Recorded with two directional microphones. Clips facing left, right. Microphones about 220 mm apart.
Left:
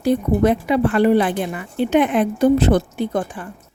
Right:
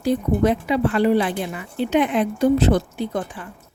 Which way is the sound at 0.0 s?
55° left (ahead or behind).